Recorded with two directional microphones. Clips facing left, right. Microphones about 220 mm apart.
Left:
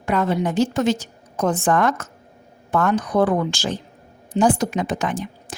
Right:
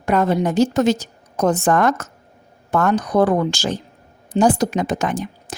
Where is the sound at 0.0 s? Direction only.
40° right (ahead or behind).